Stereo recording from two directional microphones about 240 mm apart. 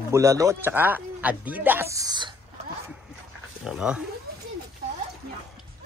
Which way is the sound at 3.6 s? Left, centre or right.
Centre.